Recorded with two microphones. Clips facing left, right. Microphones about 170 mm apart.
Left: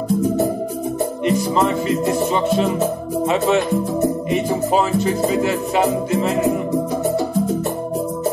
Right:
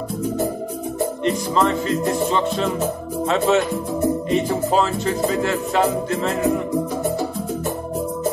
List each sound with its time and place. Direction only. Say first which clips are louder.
1.2 s music: left 2 dB; 15° left (ahead or behind)
3.4 s speech: even; centre (ahead or behind)
5.0 s speech: left 3 dB; centre (ahead or behind)